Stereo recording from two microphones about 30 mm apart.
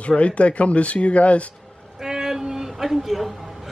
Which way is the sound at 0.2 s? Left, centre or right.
Left.